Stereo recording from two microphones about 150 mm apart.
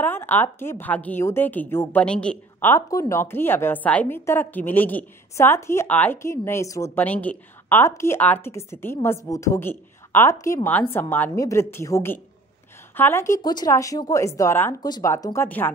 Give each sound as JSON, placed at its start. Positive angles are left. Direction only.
{"t": 0.0, "sound": "a woman's voice", "side_deg": 15}
{"t": 15.4, "sound": "a woman's voice", "side_deg": 10}